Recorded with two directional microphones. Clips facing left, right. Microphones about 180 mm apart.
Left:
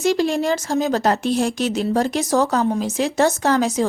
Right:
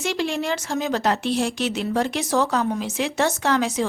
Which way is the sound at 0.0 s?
40° left (ahead or behind).